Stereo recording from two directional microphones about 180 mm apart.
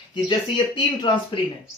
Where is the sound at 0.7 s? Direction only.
25° left (ahead or behind).